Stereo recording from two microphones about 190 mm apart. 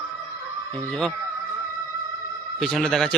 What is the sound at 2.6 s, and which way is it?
Speech, 5° left (ahead or behind).